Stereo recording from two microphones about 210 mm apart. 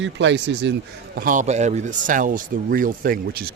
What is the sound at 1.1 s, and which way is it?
Speech, 40° right (ahead or behind).